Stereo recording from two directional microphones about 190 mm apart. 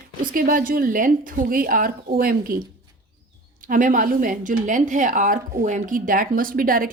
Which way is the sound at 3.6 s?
45° right (ahead or behind).